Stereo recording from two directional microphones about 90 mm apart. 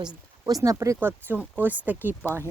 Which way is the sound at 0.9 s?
20° right (ahead or behind).